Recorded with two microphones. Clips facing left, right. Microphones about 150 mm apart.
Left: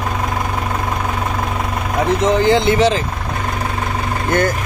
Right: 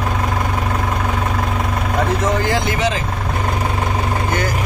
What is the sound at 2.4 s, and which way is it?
Speech, 25° left (ahead or behind).